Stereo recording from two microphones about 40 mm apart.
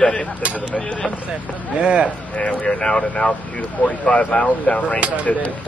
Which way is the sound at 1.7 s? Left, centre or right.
Right.